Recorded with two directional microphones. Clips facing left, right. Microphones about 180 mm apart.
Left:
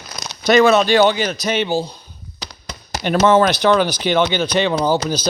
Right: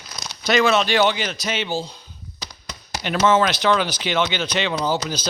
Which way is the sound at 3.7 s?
50° left (ahead or behind).